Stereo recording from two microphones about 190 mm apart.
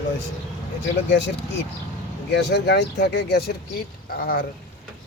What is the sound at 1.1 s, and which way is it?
Speech, 65° left (ahead or behind).